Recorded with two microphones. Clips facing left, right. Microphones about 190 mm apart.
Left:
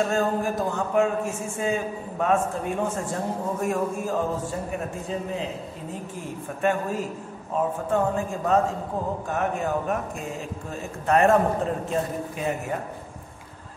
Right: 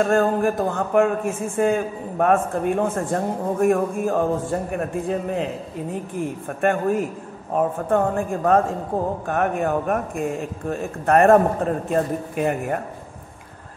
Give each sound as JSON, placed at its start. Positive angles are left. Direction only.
{"t": 0.0, "sound": "a man's voice", "side_deg": -55}
{"t": 6.6, "sound": "a man's voice", "side_deg": -55}